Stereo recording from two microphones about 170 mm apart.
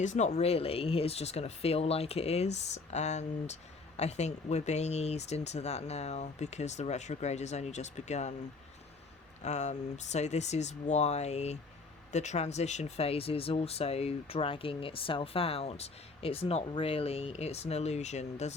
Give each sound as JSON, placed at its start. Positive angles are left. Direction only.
{"t": 0.0, "sound": "speech", "side_deg": 45}
{"t": 9.4, "sound": "speech", "side_deg": 45}